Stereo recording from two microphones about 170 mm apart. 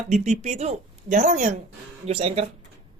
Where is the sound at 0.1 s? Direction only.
40° right (ahead or behind).